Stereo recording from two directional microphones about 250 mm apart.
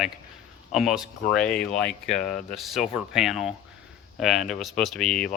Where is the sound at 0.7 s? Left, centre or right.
Centre.